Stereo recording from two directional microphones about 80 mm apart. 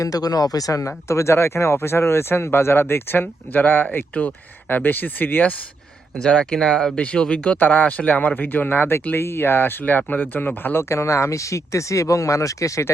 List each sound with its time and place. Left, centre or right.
0.0 s speech: left
6.2 s speech: centre; by 12.9 s left